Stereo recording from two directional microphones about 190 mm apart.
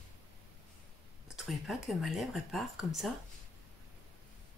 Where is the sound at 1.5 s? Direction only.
Centre (ahead or behind).